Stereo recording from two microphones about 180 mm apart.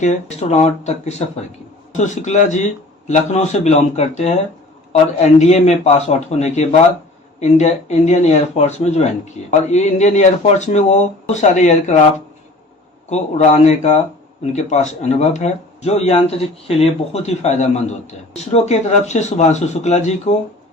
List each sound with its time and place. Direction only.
0.0 s speech: 40° left (ahead or behind)